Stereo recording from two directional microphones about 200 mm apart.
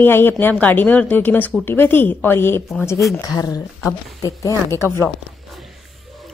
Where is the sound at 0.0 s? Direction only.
10° left (ahead or behind).